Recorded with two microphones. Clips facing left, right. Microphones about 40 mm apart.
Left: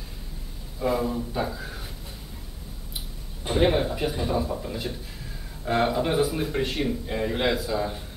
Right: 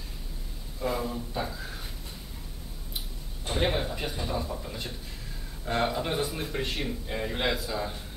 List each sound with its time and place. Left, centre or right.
0.7 s a man's voice: centre
3.4 s a man's voice: centre